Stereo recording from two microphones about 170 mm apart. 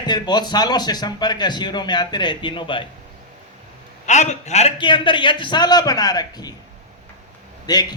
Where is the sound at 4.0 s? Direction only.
45° left (ahead or behind).